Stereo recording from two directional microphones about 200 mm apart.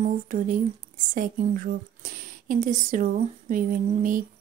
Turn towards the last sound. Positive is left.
turn(degrees=-40)  # may be behind; listen again after turning